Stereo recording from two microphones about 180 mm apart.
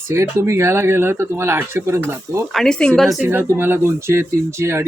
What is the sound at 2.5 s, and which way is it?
Speech, 5° left (ahead or behind).